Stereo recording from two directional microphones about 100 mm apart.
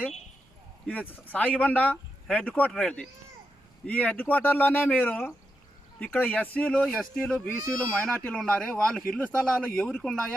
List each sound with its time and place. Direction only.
0.9 s a man's voice: 15° left (ahead or behind)